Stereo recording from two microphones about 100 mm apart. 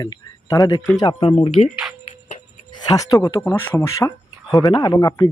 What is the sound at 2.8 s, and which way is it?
Speech, 35° left (ahead or behind).